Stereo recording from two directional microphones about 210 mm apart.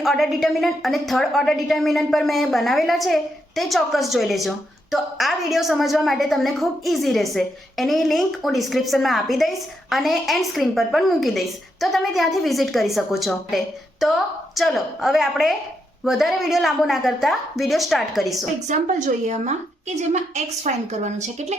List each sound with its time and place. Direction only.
0.0 s a woman's voice: centre (ahead or behind)
18.7 s a woman's voice: 35° right (ahead or behind)